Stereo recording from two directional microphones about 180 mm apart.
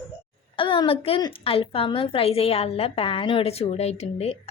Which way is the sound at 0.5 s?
25° left (ahead or behind).